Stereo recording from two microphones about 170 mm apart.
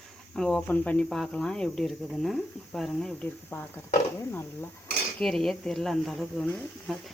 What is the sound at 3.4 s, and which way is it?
Speech, 15° left (ahead or behind).